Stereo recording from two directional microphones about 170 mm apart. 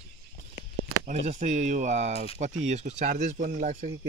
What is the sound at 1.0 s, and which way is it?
Speech, 40° right (ahead or behind).